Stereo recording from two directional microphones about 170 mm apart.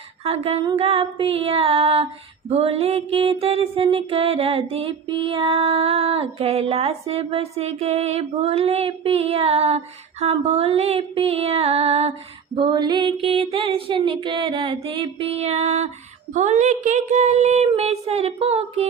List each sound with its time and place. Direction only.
0.3 s mantra: 35° right (ahead or behind)